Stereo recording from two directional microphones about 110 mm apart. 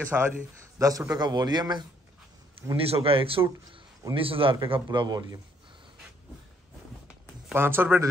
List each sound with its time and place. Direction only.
0.1 s a man's voice: 15° right (ahead or behind)
0.7 s a man's voice: 30° right (ahead or behind)
2.7 s speech: 60° right (ahead or behind)
3.4 s a man's voice: 30° right (ahead or behind)
4.1 s a man's voice: 55° right (ahead or behind)
4.9 s a man's voice: 40° right (ahead or behind)
7.5 s speech: 20° right (ahead or behind)